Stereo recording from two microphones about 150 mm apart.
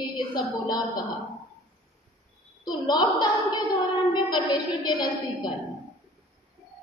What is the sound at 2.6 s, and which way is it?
A woman's voice, 30° left (ahead or behind).